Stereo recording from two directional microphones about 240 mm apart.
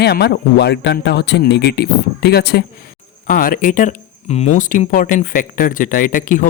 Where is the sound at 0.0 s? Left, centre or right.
Left.